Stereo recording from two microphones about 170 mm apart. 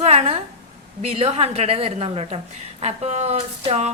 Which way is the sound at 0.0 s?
40° right (ahead or behind).